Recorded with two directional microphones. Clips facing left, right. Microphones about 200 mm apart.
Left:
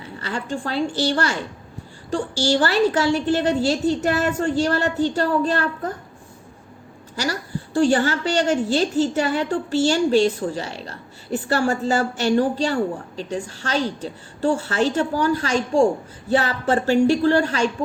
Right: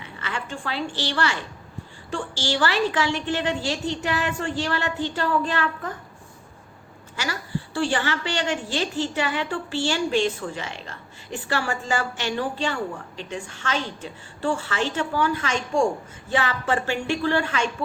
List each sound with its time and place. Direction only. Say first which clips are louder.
0.0 s a woman's voice: left 4 dB; 40° left (ahead or behind)
7.2 s a woman's voice: left 4 dB; 40° left (ahead or behind)